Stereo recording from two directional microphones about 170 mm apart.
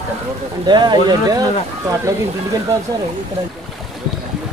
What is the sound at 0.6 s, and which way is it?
Speech, 25° right (ahead or behind).